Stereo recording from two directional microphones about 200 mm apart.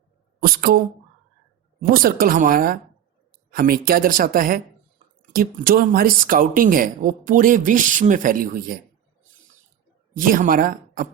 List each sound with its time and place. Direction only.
0.3 s a sound: 45° right (ahead or behind)
1.8 s speech: 45° right (ahead or behind)
10.2 s speech: 45° right (ahead or behind)